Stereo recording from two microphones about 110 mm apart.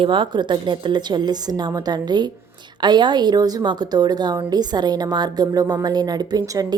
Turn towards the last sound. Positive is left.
turn(degrees=-35)  # may be behind; listen again after turning